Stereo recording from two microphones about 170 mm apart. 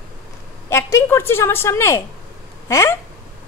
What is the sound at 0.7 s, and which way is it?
A woman's voice, 15° left (ahead or behind).